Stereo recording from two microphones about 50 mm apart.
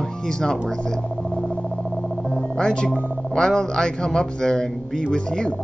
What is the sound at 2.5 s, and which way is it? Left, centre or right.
A man's voice, centre.